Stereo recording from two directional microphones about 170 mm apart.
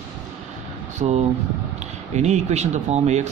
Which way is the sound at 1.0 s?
40° right (ahead or behind).